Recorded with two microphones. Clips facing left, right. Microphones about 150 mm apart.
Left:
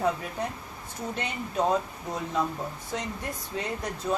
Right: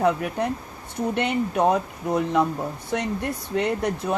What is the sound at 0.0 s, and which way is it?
Speech, 65° right (ahead or behind).